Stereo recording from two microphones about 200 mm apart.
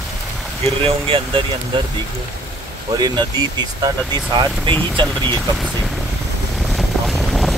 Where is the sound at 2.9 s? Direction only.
20° right (ahead or behind).